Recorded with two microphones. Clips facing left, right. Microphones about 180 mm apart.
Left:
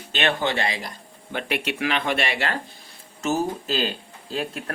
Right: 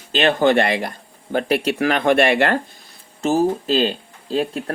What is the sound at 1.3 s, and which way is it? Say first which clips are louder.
Speech: right 8 dB; 40° right (ahead or behind).